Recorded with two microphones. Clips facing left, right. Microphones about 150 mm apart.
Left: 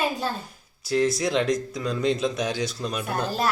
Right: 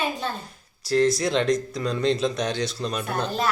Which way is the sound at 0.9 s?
Centre (ahead or behind).